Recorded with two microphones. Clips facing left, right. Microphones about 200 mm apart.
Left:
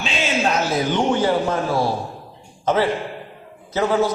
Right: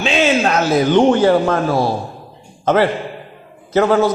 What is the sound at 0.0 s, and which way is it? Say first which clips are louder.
A man's voice: right 7 dB; 70° right (ahead or behind).